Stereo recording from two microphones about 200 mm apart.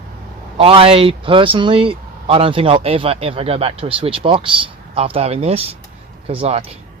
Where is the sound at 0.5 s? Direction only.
25° right (ahead or behind).